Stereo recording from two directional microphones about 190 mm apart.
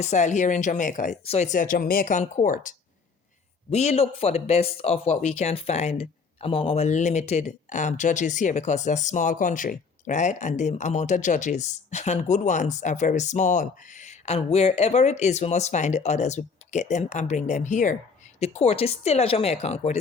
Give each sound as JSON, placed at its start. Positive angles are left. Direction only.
{"t": 0.0, "sound": "speech", "side_deg": 40}